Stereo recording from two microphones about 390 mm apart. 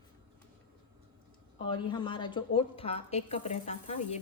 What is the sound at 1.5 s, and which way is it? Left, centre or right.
A woman's voice, centre.